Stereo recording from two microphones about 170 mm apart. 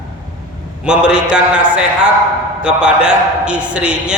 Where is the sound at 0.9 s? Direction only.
5° right (ahead or behind).